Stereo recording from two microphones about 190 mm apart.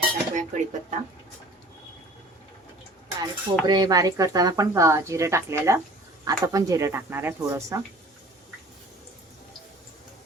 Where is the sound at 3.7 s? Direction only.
20° right (ahead or behind).